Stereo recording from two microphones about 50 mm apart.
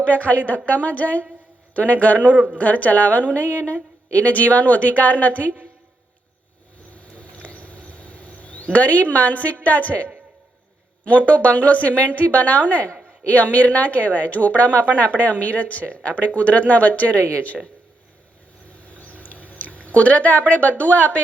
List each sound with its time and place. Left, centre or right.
0.0 s a woman's voice: left
2.3 s speech: right
2.6 s a woman's voice: left
6.9 s insect: left
8.7 s a woman's voice: left
18.7 s a sound: left